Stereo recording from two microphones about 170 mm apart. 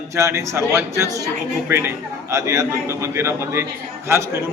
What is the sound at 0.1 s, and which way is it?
Speech, 15° right (ahead or behind).